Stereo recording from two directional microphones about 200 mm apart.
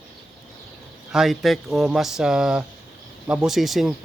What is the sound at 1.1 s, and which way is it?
Speech, centre (ahead or behind).